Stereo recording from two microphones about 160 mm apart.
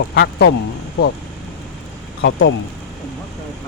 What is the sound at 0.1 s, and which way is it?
Speech, 90° left.